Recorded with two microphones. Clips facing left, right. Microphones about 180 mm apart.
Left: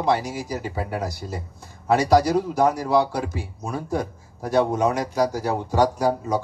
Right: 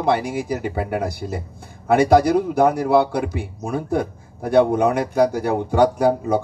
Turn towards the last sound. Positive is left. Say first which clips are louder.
# right 4 dB
turn(degrees=-55)  # may be behind; listen again after turning